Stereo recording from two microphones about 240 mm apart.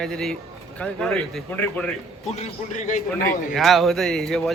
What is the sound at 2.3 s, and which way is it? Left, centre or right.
Speech, left.